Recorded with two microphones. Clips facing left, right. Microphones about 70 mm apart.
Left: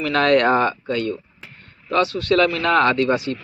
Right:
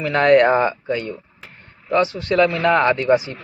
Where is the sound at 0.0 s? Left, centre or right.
Centre.